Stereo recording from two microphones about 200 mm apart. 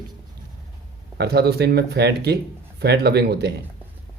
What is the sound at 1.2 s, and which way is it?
Speech, 55° right (ahead or behind).